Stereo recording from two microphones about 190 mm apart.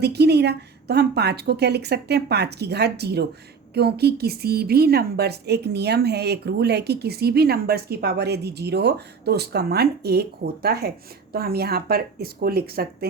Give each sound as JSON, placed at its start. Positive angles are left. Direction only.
{"t": 0.0, "sound": "speech", "side_deg": -60}